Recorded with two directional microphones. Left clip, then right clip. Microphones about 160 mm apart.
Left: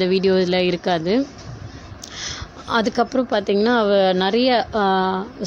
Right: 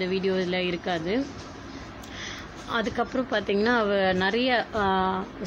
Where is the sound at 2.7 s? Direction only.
45° left (ahead or behind).